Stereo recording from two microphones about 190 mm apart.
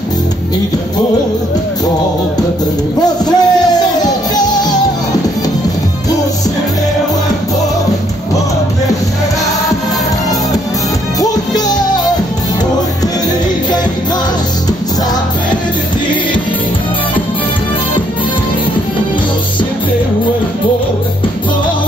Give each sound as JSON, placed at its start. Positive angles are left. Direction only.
{"t": 3.3, "sound": "music", "side_deg": 20}
{"t": 11.1, "sound": "music", "side_deg": 20}